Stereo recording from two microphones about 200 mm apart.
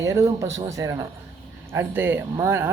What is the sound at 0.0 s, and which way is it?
Speech, 15° right (ahead or behind).